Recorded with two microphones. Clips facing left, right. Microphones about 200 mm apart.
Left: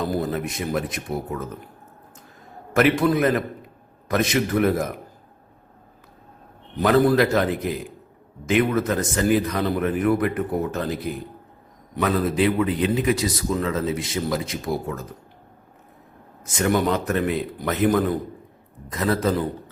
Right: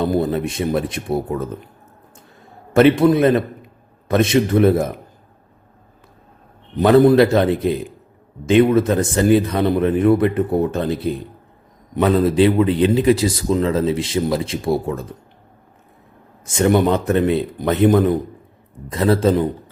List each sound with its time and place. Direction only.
0.0 s a man's voice: 25° right (ahead or behind)
2.7 s a man's voice: 25° right (ahead or behind)
6.7 s a man's voice: 25° right (ahead or behind)
16.5 s a man's voice: 25° right (ahead or behind)